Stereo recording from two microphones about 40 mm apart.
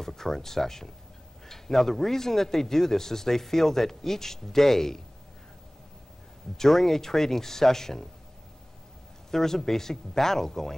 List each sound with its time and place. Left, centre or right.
0.0 s speech: centre
6.5 s speech: centre
9.3 s speech: centre